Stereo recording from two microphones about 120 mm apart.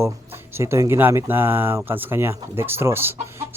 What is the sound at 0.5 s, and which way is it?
Speech, 25° right (ahead or behind).